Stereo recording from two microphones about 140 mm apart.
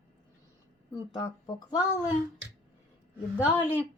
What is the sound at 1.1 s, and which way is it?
Speech, 30° left (ahead or behind).